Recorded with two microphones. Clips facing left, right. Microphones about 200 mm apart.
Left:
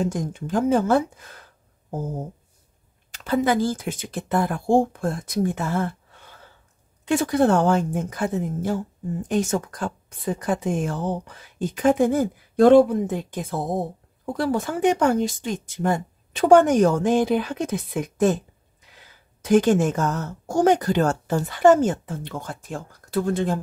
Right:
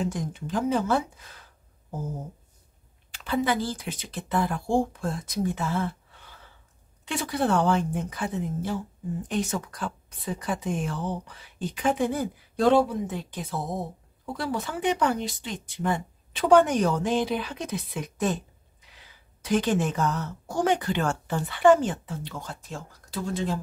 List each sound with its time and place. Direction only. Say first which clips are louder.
0.0 s speech: left 4 dB; 45° left (ahead or behind)
3.3 s speech: left 5 dB; 45° left (ahead or behind)
19.4 s speech: left 7 dB; 45° left (ahead or behind)